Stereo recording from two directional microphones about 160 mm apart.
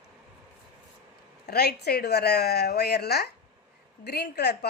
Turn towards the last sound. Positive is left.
turn(degrees=90)